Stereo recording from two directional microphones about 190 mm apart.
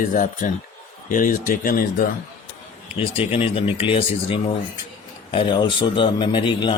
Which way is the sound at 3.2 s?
30° left (ahead or behind).